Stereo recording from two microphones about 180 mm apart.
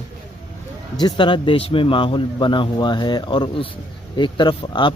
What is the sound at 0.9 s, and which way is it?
Speech, 25° left (ahead or behind).